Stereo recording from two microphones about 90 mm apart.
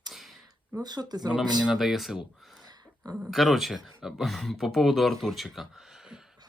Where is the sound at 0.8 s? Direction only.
50° right (ahead or behind).